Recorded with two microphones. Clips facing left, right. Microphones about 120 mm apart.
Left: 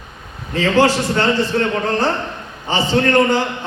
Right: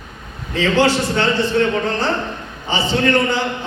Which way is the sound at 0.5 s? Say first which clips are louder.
Left 1 dB; 40° left (ahead or behind).